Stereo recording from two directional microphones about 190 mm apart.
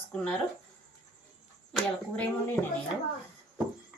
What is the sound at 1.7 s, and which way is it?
Speech, 5° left (ahead or behind).